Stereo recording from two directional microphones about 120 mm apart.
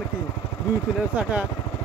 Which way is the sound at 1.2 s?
10° right (ahead or behind).